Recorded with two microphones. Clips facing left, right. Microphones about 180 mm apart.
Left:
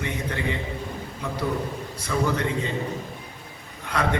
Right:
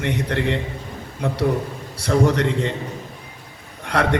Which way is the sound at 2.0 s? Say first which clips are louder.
Right 7 dB; 75° right (ahead or behind).